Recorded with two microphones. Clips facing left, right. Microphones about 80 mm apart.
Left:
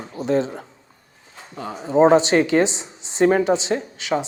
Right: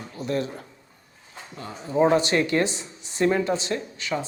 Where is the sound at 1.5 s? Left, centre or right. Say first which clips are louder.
Left 7 dB; left.